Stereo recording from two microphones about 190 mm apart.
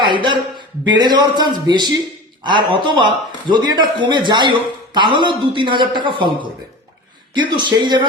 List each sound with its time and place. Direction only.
0.0 s a man's voice: 25° right (ahead or behind)